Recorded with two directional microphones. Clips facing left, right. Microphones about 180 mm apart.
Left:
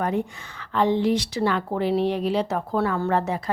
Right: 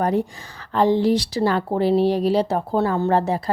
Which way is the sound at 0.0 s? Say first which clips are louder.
Right 4 dB; 35° right (ahead or behind).